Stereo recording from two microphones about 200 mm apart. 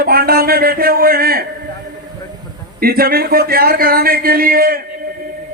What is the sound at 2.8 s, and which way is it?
A man's voice, 50° right (ahead or behind).